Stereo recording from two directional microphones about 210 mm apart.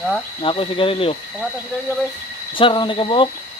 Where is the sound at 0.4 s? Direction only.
25° left (ahead or behind).